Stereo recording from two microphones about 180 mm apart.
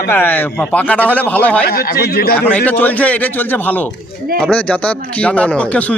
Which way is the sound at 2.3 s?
10° left (ahead or behind).